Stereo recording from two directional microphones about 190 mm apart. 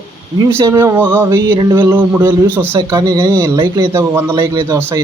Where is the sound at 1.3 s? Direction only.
20° right (ahead or behind).